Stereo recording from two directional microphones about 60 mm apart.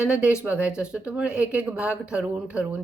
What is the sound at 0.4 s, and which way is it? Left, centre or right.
Speech, centre.